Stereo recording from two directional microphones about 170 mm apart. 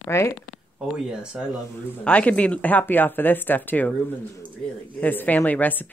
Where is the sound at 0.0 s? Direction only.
15° left (ahead or behind).